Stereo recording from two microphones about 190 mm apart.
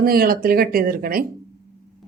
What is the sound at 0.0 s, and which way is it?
Speech, 50° right (ahead or behind).